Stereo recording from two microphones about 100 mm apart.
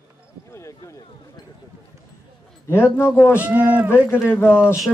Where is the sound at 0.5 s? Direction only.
30° left (ahead or behind).